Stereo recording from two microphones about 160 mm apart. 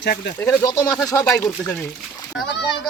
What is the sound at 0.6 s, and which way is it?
Speech, 20° left (ahead or behind).